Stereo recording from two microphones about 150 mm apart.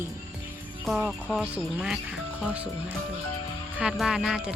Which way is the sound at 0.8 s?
Centre (ahead or behind).